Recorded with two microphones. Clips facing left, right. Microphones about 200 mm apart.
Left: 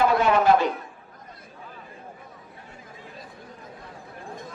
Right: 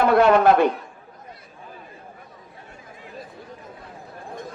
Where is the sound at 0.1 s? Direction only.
60° right (ahead or behind).